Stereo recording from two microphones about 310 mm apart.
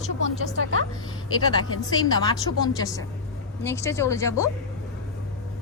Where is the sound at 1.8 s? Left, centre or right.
Centre.